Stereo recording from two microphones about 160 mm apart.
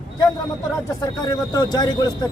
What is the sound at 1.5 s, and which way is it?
Speech, 25° left (ahead or behind).